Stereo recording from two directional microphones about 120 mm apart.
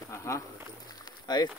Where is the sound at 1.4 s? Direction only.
35° left (ahead or behind).